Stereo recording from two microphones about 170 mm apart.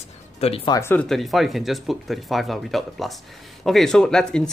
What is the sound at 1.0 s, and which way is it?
Speech, centre (ahead or behind).